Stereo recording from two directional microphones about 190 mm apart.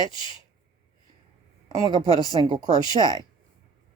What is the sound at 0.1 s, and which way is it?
Speech, 25° left (ahead or behind).